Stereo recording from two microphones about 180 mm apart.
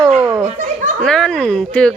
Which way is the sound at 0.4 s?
40° right (ahead or behind).